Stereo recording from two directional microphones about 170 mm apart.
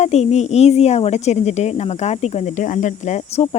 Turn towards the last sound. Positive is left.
turn(degrees=35)  # may be behind; listen again after turning